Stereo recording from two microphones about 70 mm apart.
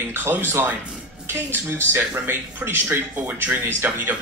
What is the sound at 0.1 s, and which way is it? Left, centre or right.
Speech, right.